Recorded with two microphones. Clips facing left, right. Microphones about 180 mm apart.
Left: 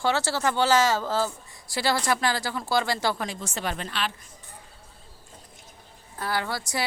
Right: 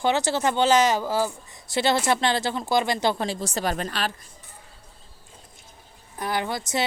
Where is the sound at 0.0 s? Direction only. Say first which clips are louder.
Right 2 dB; 20° right (ahead or behind); by 4.1 s 40° right (ahead or behind).